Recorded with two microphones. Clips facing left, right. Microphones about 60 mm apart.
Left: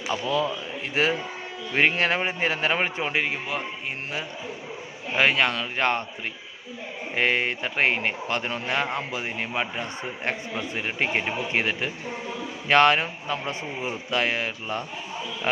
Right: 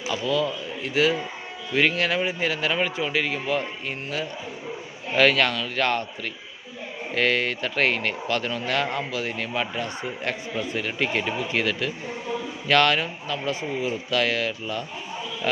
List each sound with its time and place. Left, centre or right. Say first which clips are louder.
0.1 s a man's voice: right 1 dB; left; by 3.7 s centre
5.1 s speech: right 2 dB; centre
7.1 s speech: right 1 dB; left